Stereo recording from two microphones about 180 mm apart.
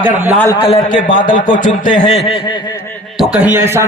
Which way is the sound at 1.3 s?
25° left (ahead or behind).